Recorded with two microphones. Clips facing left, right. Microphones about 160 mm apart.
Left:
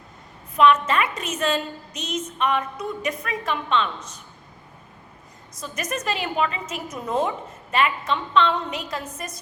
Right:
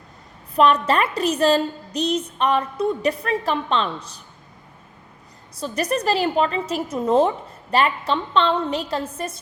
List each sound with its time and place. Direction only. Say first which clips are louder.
0.5 s a woman's voice: right 1 dB; 35° right (ahead or behind)
5.5 s a woman's voice: right 7 dB; 35° right (ahead or behind)